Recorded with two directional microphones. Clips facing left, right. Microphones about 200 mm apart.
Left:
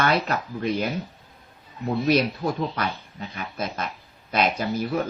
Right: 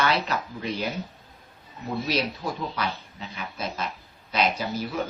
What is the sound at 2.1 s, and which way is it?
Speech, 55° left (ahead or behind).